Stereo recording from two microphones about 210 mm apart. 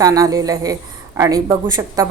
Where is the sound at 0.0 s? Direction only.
15° right (ahead or behind).